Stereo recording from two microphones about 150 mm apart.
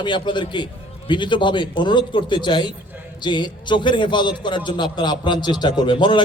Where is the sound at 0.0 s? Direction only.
30° left (ahead or behind).